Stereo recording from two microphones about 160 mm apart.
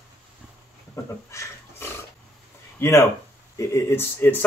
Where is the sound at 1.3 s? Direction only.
20° left (ahead or behind).